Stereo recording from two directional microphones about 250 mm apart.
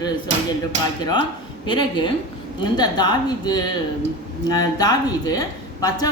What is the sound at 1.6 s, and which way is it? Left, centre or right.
A woman's voice, centre.